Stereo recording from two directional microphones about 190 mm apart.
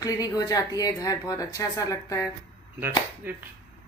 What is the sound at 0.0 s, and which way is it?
Speech, 20° left (ahead or behind).